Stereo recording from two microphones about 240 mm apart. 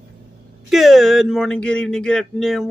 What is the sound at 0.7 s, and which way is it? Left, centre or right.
Speech, centre.